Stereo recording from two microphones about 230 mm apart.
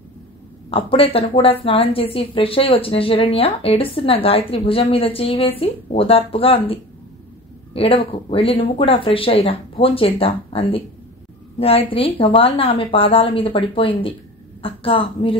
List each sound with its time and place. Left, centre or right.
0.7 s a woman's voice: left